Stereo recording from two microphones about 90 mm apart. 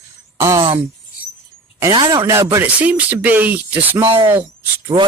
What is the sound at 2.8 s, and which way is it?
Speech, 15° right (ahead or behind).